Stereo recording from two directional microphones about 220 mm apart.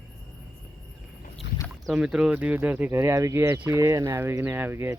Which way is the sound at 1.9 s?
5° right (ahead or behind).